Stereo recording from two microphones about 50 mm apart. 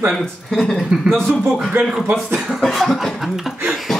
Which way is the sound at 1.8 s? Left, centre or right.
Right.